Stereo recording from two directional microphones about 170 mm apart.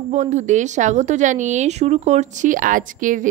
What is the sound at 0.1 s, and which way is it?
A woman's voice, 45° right (ahead or behind).